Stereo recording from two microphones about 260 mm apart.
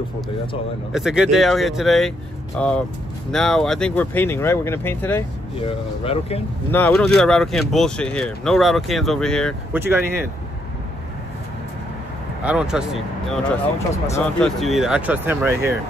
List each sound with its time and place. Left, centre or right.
0.9 s speech: centre
5.6 s speech: left
6.7 s speech: centre
9.8 s speech: centre
12.4 s speech: centre
14.6 s speech: centre